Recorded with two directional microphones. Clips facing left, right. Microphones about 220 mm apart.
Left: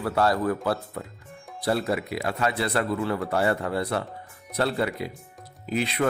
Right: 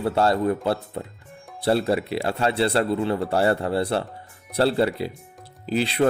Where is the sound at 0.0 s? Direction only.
25° right (ahead or behind).